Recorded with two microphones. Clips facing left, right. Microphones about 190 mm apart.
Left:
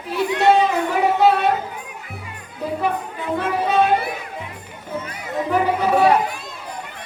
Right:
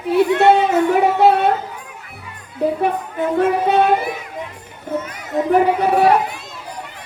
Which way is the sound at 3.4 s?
60° right (ahead or behind).